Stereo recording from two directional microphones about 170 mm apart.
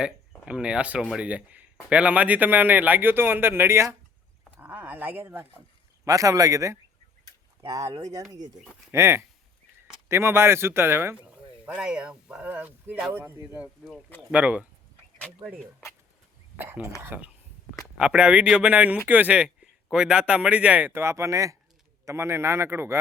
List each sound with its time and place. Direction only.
0.0 s a man's voice: 5° right (ahead or behind)